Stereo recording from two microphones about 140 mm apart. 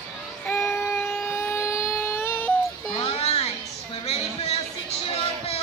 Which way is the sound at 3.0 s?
45° left (ahead or behind).